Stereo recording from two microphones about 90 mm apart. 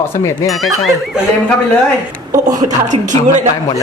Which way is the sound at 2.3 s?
45° right (ahead or behind).